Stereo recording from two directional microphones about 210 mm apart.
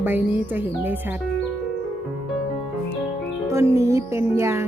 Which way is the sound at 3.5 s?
15° right (ahead or behind).